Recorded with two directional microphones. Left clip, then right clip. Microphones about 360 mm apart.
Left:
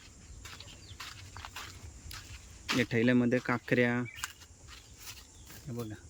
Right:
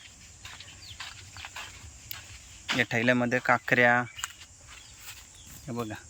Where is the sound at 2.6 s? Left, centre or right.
Centre.